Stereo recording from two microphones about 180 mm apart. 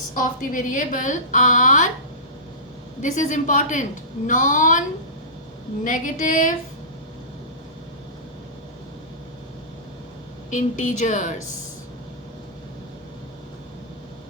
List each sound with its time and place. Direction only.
0.2 s a woman's voice: 45° left (ahead or behind)
3.0 s a woman's voice: 45° left (ahead or behind)
5.8 s a woman's voice: 45° left (ahead or behind)
10.5 s a woman's voice: 45° left (ahead or behind)